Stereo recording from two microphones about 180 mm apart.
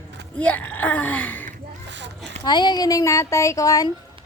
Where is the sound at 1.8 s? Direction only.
80° right.